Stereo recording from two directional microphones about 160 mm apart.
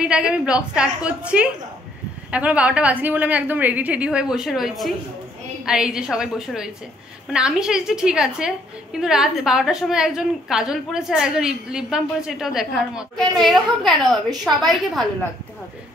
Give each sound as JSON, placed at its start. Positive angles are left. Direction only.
{"t": 0.0, "sound": "a woman's voice", "side_deg": -5}